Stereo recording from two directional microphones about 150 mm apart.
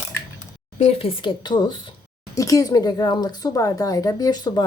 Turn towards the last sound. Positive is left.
turn(degrees=25)  # may be behind; listen again after turning